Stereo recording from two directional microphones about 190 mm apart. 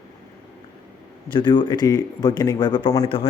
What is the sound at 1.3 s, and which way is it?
Speech, 25° left (ahead or behind).